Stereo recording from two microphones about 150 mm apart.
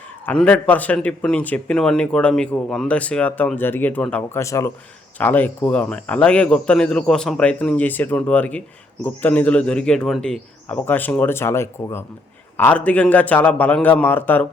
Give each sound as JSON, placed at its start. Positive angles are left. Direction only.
{"t": 0.3, "sound": "a man's voice", "side_deg": 10}